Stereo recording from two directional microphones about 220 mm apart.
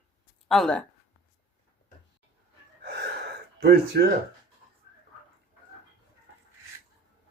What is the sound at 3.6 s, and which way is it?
Speech, 45° right (ahead or behind).